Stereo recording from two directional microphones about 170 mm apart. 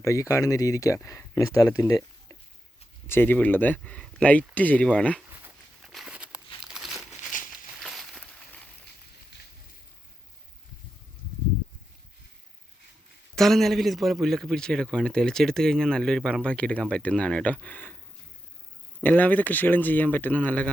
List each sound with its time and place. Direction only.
0.0 s speech: 20° left (ahead or behind)
3.1 s speech: 10° left (ahead or behind)
5.3 s a sound: 10° right (ahead or behind)
5.8 s a sound: centre (ahead or behind)
13.3 s a man's voice: centre (ahead or behind)
19.0 s speech: 10° left (ahead or behind)